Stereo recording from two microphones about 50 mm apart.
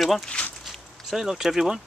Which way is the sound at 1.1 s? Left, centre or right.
Centre.